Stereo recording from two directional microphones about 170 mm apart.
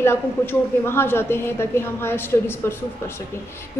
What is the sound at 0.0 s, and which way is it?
A man's voice, 15° left (ahead or behind).